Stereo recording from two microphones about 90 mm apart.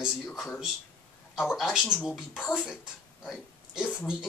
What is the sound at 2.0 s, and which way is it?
Speech, 5° right (ahead or behind).